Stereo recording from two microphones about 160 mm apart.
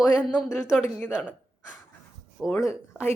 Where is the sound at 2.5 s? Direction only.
15° left (ahead or behind).